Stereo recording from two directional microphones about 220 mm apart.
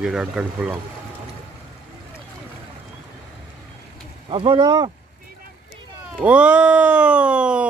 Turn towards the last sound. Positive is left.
turn(degrees=-5)  # may be behind; listen again after turning